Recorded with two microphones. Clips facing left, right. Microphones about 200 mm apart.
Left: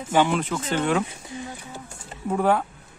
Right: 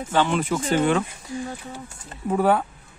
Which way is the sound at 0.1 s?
15° left (ahead or behind).